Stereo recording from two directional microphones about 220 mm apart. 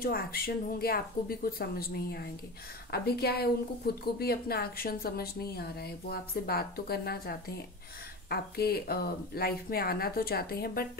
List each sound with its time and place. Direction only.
0.0 s speech: 40° left (ahead or behind)